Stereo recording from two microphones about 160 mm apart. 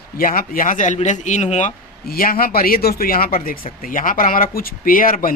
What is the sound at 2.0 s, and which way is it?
Speech, 60° left (ahead or behind).